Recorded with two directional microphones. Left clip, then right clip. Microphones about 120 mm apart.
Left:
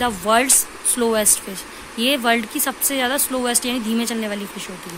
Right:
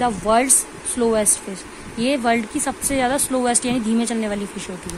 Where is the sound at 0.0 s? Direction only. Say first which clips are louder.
Even; 15° right (ahead or behind).